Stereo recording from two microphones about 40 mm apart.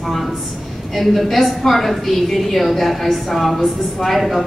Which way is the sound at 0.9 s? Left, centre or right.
Centre.